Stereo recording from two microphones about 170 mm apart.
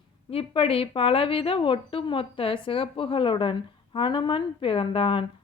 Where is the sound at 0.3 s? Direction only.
35° left (ahead or behind).